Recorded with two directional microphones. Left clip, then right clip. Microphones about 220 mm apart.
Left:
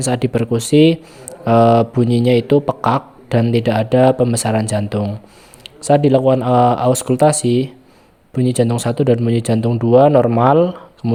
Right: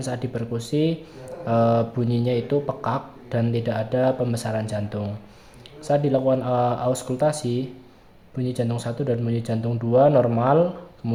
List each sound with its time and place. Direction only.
0.0 s speech: 40° left (ahead or behind)